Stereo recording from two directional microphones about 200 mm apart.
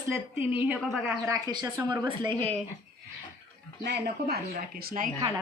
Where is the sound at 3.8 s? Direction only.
55° right (ahead or behind).